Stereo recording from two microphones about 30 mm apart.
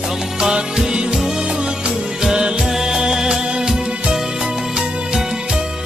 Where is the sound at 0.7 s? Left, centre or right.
Centre.